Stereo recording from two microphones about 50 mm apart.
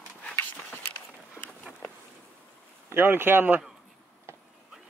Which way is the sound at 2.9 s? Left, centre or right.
Right.